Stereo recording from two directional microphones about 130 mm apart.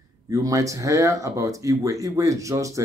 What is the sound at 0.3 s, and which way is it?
Speech, 25° right (ahead or behind).